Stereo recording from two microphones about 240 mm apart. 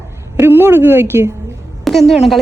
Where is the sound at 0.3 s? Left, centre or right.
Centre.